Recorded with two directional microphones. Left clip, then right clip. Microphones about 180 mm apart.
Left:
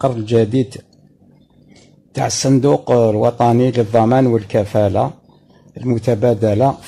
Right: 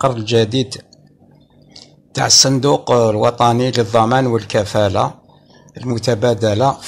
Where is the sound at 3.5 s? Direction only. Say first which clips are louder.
Left 1 dB; 30° left (ahead or behind).